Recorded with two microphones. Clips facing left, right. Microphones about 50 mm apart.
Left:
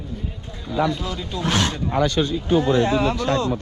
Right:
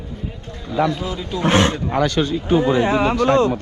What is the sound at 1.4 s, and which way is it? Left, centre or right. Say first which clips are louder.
Speech: right 6 dB; right.